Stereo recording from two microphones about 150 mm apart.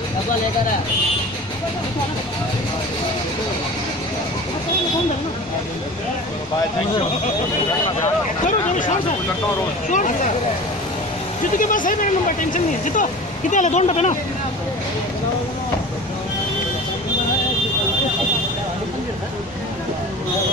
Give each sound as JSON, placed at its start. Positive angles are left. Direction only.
{"t": 8.5, "sound": "speech", "side_deg": 60}
{"t": 11.5, "sound": "speech", "side_deg": 60}